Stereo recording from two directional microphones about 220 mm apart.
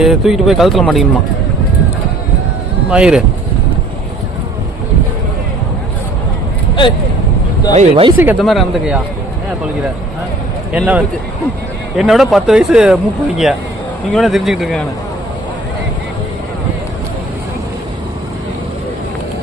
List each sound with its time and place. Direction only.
0.0 s speech: centre (ahead or behind)
2.9 s speech: 5° right (ahead or behind)
7.7 s speech: 30° right (ahead or behind)
8.2 s speech: 5° right (ahead or behind)
10.7 s speech: 5° right (ahead or behind)